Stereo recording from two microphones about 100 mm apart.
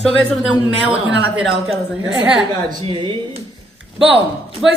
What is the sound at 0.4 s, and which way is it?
A man's voice, 10° right (ahead or behind).